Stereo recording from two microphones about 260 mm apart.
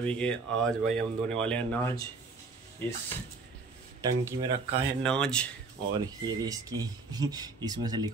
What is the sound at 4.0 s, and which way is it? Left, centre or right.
Speech, centre.